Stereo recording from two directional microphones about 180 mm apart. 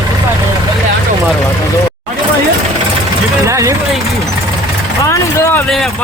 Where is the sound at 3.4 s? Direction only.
15° right (ahead or behind).